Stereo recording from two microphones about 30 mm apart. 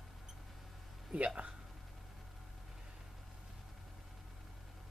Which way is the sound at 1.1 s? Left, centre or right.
Right.